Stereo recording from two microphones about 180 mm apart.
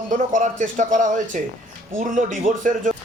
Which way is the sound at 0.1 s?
45° right (ahead or behind).